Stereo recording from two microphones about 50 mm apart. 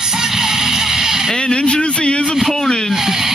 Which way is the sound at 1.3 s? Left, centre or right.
Centre.